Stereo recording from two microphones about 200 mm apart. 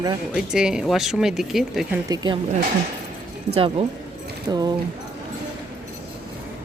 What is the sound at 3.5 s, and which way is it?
Speech, 30° right (ahead or behind).